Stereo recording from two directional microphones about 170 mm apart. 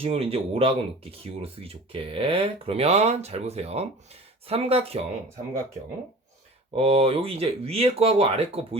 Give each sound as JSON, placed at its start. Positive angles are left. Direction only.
{"t": 0.0, "sound": "speech", "side_deg": -35}
{"t": 6.7, "sound": "speech", "side_deg": -35}